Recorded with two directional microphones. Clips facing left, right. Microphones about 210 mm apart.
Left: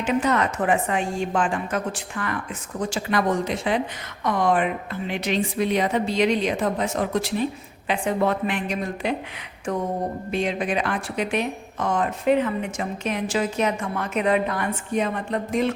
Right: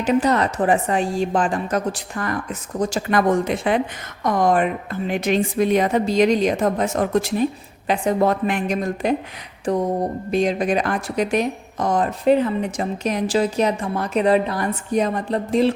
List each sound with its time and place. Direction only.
0.0 s a woman's voice: 35° right (ahead or behind); by 3.8 s 55° right (ahead or behind)
4.2 s a woman's voice: 45° right (ahead or behind)